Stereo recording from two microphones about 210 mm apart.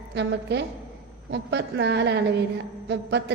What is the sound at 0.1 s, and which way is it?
A woman's voice, 55° right (ahead or behind).